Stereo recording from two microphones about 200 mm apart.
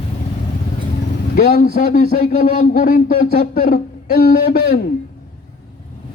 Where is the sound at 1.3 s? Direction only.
45° left (ahead or behind).